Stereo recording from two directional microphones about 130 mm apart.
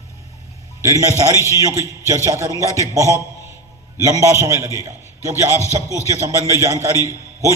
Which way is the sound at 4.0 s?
25° right (ahead or behind).